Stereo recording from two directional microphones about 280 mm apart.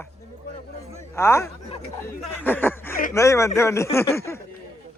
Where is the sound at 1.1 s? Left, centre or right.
Centre.